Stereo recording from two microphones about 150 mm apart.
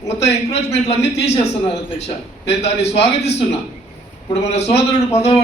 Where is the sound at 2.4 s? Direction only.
45° left (ahead or behind).